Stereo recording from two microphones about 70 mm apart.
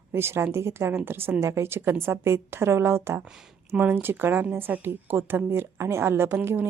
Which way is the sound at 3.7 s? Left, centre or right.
Right.